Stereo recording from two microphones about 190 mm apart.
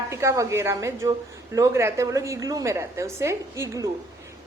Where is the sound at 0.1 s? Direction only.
15° right (ahead or behind).